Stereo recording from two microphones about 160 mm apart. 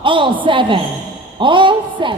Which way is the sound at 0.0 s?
30° right (ahead or behind).